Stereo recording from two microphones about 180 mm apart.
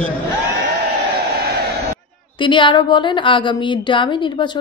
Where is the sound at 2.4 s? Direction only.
25° left (ahead or behind).